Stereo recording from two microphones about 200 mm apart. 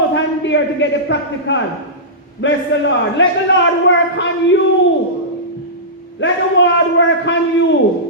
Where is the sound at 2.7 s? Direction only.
65° left (ahead or behind).